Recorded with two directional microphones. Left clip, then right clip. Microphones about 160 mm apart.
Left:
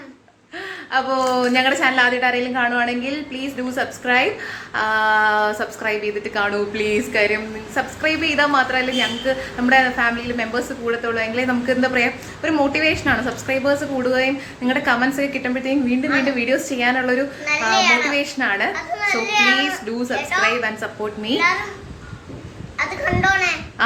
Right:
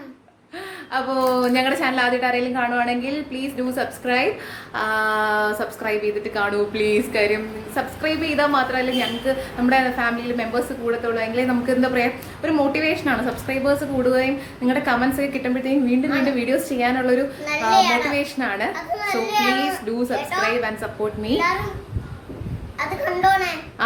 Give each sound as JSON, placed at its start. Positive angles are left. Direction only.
{"t": 0.9, "sound": "a woman's voice", "side_deg": 10}
{"t": 18.7, "sound": "a child's voice", "side_deg": -20}
{"t": 19.5, "sound": "a woman's voice", "side_deg": 5}